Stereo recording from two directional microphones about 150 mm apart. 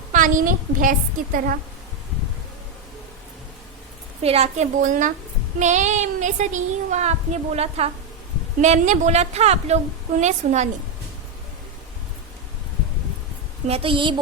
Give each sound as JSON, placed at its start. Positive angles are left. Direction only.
{"t": 0.1, "sound": "a woman's voice", "side_deg": -60}
{"t": 4.2, "sound": "speech", "side_deg": -45}
{"t": 13.7, "sound": "a woman's voice", "side_deg": -40}